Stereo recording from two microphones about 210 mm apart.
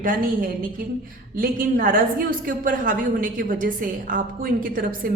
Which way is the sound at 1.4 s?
45° right (ahead or behind).